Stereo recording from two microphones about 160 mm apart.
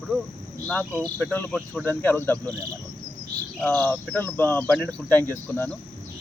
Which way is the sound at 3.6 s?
10° left (ahead or behind).